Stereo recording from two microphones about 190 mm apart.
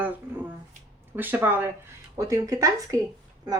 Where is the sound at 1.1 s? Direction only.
10° right (ahead or behind).